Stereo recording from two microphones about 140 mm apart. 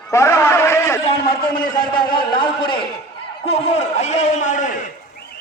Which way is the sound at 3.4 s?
45° left (ahead or behind).